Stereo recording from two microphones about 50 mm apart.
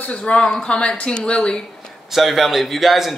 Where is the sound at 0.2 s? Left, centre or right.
Centre.